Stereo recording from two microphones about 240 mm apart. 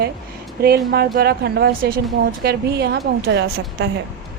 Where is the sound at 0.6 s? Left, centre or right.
Right.